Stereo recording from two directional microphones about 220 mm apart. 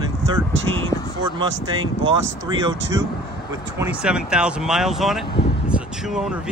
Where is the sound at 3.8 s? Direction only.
5° right (ahead or behind).